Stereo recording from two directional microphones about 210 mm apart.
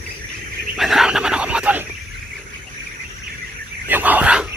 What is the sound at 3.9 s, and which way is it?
Dog, 10° right (ahead or behind).